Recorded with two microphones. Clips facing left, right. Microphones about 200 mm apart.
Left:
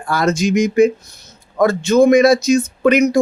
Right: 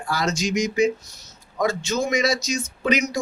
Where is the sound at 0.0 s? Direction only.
55° left (ahead or behind).